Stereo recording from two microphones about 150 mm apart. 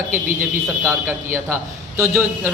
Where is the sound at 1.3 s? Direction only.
15° right (ahead or behind).